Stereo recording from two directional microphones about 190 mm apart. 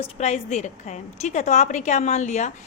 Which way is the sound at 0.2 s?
35° left (ahead or behind).